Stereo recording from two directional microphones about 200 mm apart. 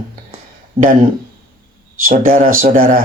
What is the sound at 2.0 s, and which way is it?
Speech, 45° right (ahead or behind).